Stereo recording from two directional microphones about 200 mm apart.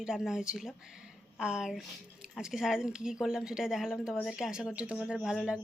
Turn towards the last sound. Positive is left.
turn(degrees=-5)  # may be behind; listen again after turning